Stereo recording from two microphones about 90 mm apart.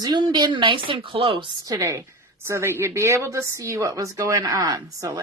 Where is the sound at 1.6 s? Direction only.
35° right (ahead or behind).